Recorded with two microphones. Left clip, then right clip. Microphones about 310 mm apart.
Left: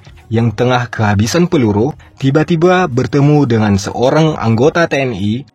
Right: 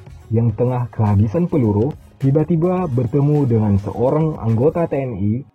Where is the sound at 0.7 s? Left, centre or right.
Left.